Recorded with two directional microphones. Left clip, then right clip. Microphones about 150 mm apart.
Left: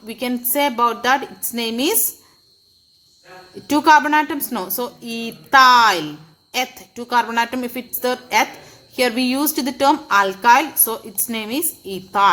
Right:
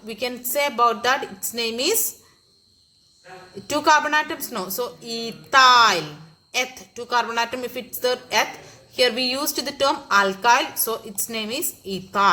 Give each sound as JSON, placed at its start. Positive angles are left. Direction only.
{"t": 0.1, "sound": "speech", "side_deg": 50}
{"t": 3.7, "sound": "speech", "side_deg": 50}